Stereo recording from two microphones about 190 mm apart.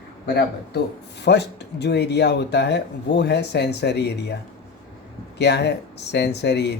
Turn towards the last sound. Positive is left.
turn(degrees=60)  # may be behind; listen again after turning